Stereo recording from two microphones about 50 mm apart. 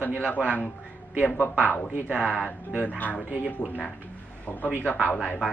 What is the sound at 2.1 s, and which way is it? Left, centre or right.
Speech, centre.